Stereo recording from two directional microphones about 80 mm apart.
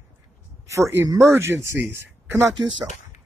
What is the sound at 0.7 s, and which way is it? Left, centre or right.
Speech, right.